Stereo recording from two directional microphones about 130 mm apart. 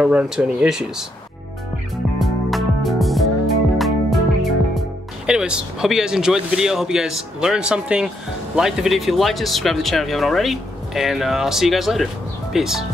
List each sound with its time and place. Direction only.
0.0 s speech: 5° right (ahead or behind)
2.1 s music: centre (ahead or behind)
5.2 s speech: 5° right (ahead or behind)